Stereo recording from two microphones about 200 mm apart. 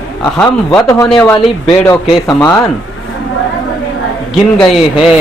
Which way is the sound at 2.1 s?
20° left (ahead or behind).